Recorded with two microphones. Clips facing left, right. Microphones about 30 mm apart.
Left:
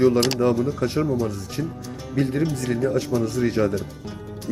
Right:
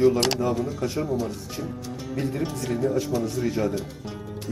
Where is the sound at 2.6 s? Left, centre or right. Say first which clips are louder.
Left 2 dB; left.